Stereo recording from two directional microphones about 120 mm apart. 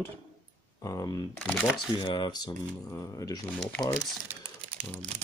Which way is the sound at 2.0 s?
40° left (ahead or behind).